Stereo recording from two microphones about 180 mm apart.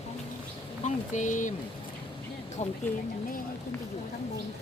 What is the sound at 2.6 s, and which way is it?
Speech, 40° left (ahead or behind).